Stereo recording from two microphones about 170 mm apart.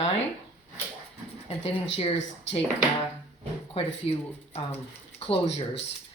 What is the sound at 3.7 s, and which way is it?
Speech, 35° left (ahead or behind).